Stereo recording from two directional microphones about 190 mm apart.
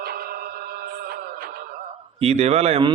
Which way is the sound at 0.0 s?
50° right (ahead or behind).